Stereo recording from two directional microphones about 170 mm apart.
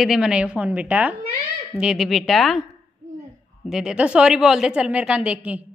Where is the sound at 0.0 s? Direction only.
5° right (ahead or behind).